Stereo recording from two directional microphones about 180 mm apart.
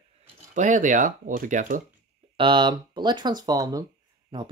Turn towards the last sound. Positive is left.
turn(degrees=-25)  # may be behind; listen again after turning